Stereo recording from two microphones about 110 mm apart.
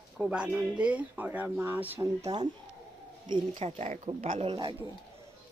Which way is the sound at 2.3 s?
35° right (ahead or behind).